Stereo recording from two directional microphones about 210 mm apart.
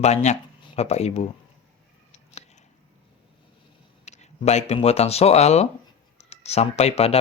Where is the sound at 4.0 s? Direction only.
30° left (ahead or behind).